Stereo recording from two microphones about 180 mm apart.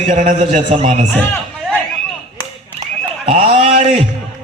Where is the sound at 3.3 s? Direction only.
35° right (ahead or behind).